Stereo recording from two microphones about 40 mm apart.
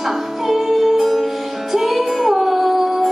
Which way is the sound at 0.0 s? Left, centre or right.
Centre.